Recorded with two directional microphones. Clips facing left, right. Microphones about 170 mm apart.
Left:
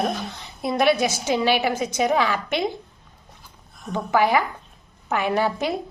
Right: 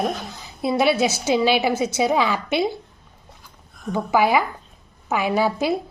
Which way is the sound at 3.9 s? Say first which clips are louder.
Right 1 dB; 10° right (ahead or behind).